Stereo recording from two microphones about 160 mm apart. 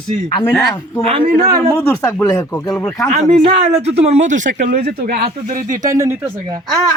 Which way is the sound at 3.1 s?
40° right (ahead or behind).